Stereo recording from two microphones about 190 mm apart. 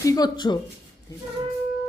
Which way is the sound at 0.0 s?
20° left (ahead or behind).